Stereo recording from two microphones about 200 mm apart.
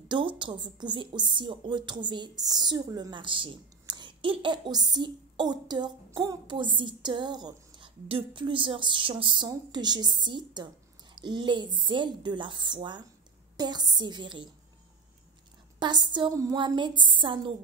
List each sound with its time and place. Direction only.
0.1 s a woman's voice: 25° right (ahead or behind)
15.8 s a woman's voice: 20° right (ahead or behind)